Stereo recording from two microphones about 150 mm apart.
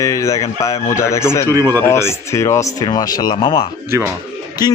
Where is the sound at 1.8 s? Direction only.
15° left (ahead or behind).